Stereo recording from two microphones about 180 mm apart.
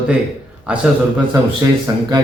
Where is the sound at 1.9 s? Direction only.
20° right (ahead or behind).